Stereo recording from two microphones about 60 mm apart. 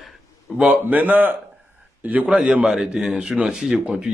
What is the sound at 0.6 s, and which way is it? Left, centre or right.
Speech, right.